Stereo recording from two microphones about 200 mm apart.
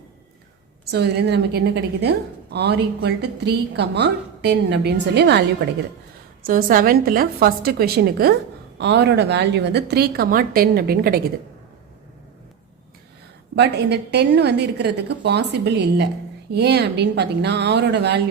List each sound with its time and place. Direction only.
0.9 s a woman's voice: 55° right (ahead or behind)
6.4 s a woman's voice: 45° right (ahead or behind)
13.6 s a woman's voice: 55° right (ahead or behind)